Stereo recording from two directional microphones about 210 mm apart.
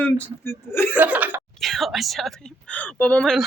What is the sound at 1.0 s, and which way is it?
Speech, 5° right (ahead or behind).